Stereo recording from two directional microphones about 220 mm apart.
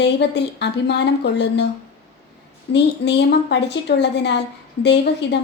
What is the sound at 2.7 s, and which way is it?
Speech, 50° left (ahead or behind).